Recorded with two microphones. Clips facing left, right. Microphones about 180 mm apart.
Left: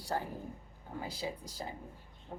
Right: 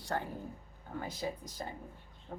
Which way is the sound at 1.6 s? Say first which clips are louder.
Even; 15° left (ahead or behind).